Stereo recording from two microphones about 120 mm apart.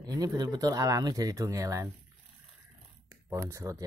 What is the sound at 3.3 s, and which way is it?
Speech, 25° right (ahead or behind).